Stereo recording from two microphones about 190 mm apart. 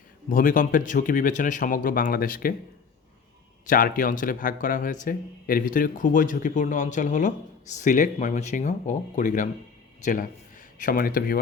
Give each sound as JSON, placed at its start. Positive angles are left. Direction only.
{"t": 0.3, "sound": "speech", "side_deg": 45}
{"t": 3.7, "sound": "speech", "side_deg": 45}